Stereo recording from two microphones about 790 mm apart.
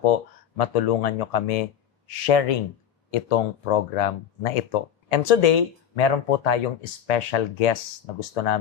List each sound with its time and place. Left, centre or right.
0.0 s speech: left